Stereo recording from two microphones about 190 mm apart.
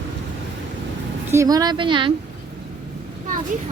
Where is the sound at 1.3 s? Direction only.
20° right (ahead or behind).